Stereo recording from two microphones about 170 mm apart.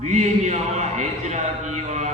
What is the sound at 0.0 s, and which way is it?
A man's voice, 45° right (ahead or behind).